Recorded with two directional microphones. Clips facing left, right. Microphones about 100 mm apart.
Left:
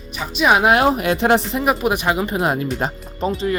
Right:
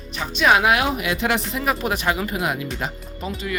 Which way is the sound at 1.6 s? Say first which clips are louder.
Left 4 dB; 20° left (ahead or behind).